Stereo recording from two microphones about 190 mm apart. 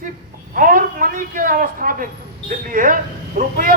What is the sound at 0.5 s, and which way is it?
A man's voice, 45° right (ahead or behind).